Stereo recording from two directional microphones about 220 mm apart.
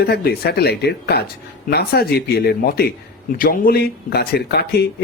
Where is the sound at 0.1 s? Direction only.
45° left (ahead or behind).